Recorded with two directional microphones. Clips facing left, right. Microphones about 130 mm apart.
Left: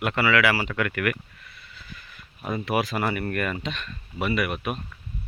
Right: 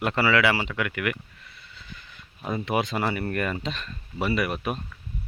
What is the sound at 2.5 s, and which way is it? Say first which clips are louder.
Speech: even; 25° right (ahead or behind).